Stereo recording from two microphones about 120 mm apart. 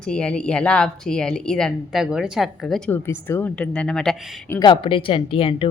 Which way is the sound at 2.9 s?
20° left (ahead or behind).